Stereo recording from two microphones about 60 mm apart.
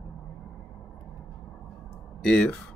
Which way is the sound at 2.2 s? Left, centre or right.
Centre.